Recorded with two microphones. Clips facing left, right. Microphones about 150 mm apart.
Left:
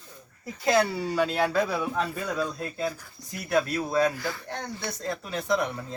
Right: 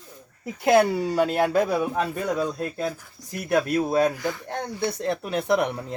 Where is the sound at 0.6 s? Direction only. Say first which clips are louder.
Right 5 dB; 55° right (ahead or behind).